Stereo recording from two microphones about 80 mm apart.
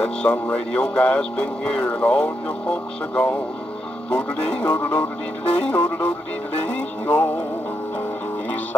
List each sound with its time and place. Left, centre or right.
0.0 s speech: centre
4.1 s music: centre